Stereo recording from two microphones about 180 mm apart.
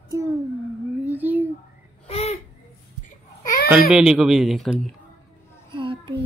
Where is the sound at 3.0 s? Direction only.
50° left (ahead or behind).